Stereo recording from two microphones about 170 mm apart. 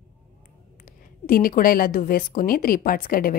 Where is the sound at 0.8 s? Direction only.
55° left (ahead or behind).